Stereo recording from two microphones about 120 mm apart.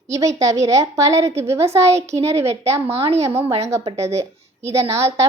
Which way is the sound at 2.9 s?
60° right (ahead or behind).